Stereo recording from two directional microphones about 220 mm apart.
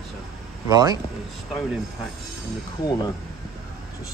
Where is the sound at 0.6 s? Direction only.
15° right (ahead or behind).